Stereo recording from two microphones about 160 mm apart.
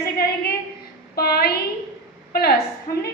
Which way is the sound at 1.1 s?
75° left (ahead or behind).